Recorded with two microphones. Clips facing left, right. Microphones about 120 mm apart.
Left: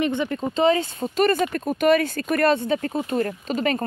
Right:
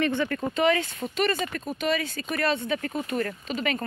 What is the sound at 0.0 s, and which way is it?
Speech, 20° left (ahead or behind).